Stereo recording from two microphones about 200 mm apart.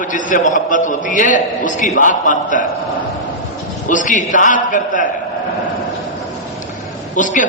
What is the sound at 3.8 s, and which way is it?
A man's voice, 40° left (ahead or behind).